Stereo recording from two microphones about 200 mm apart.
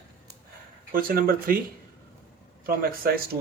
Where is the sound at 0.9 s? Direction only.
45° right (ahead or behind).